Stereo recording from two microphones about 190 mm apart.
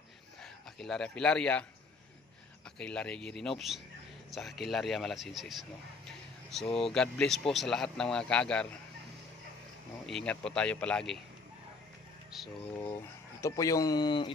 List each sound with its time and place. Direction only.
0.4 s speech: centre (ahead or behind)
2.8 s speech: 5° left (ahead or behind)
6.8 s speech: 5° left (ahead or behind)
10.0 s speech: 5° left (ahead or behind)
12.3 s speech: centre (ahead or behind)
13.4 s speech: 15° left (ahead or behind)